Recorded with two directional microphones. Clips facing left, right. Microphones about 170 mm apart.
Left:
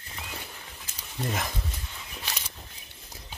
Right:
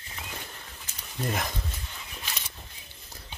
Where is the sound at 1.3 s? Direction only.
Centre (ahead or behind).